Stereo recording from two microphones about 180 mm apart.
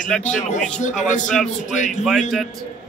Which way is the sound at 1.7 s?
45° left (ahead or behind).